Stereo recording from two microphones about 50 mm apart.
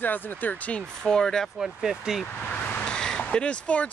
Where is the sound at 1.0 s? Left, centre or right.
Centre.